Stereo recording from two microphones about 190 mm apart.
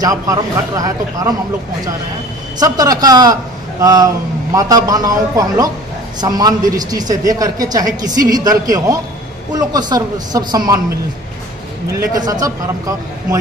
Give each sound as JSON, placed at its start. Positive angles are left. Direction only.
{"t": 0.0, "sound": "a woman's voice", "side_deg": -20}
{"t": 2.6, "sound": "a woman's voice", "side_deg": -20}
{"t": 12.1, "sound": "a woman's voice", "side_deg": -20}